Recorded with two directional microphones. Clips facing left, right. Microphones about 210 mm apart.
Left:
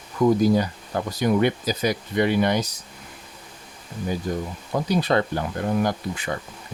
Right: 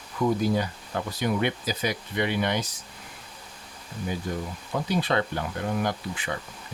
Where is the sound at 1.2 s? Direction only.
40° left (ahead or behind).